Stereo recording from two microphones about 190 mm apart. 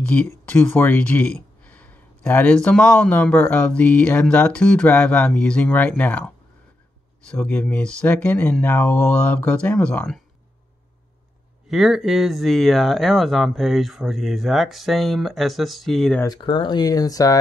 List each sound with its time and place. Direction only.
0.0 s speech: 10° left (ahead or behind)
11.7 s speech: centre (ahead or behind)
16.2 s speech: 20° left (ahead or behind)